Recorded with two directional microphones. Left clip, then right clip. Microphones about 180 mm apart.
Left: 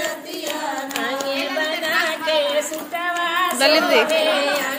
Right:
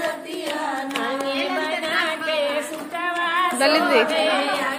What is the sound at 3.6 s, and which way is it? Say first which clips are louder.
Speech: left 3 dB; centre (ahead or behind).